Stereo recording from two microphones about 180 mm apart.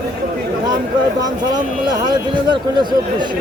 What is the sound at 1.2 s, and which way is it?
Speech, 20° right (ahead or behind).